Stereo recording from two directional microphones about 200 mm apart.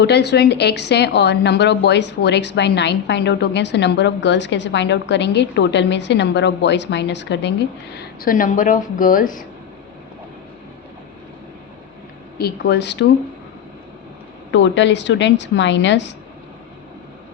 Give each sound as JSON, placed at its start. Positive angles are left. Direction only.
{"t": 0.0, "sound": "a woman's voice", "side_deg": 55}
{"t": 7.9, "sound": "speech", "side_deg": 45}
{"t": 12.4, "sound": "a woman's voice", "side_deg": 50}
{"t": 14.5, "sound": "a woman's voice", "side_deg": 65}